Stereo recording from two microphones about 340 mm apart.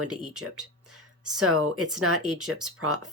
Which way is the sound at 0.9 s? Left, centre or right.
Right.